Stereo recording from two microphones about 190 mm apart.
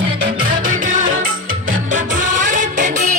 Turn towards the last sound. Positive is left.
turn(degrees=-40)  # may be behind; listen again after turning